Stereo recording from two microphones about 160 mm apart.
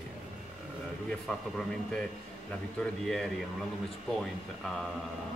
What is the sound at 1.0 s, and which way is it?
A man's voice, centre (ahead or behind).